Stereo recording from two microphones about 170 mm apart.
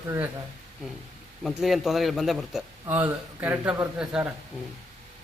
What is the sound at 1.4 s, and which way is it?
A man's voice, centre (ahead or behind).